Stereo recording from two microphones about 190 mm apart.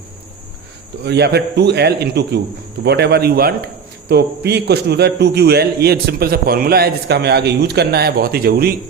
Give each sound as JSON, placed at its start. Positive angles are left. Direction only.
{"t": 1.0, "sound": "a man's voice", "side_deg": -60}